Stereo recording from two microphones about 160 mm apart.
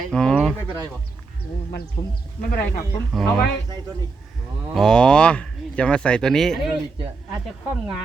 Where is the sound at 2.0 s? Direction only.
25° left (ahead or behind).